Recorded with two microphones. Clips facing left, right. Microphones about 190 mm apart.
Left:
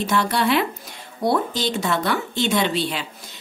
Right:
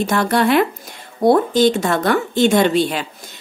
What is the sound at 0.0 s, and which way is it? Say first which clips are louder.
A woman's voice: right 4 dB; 50° right (ahead or behind).